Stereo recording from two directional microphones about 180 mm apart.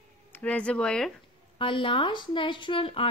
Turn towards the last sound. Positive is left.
turn(degrees=30)  # may be behind; listen again after turning